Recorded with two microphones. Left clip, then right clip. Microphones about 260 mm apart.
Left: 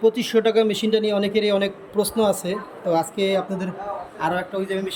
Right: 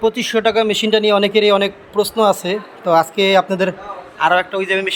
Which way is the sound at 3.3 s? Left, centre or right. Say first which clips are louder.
Right 11 dB; right.